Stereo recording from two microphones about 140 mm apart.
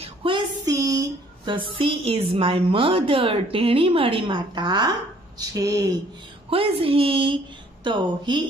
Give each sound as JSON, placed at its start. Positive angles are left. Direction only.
{"t": 0.0, "sound": "child singing", "side_deg": -40}
{"t": 0.7, "sound": "a woman's voice", "side_deg": -25}
{"t": 6.5, "sound": "a woman's voice", "side_deg": -40}